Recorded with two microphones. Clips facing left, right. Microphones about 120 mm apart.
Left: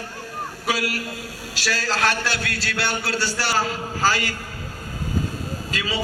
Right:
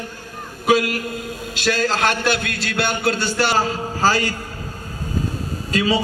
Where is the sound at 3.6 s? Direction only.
40° right (ahead or behind).